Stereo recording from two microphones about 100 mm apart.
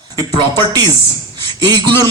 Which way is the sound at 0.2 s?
40° right (ahead or behind).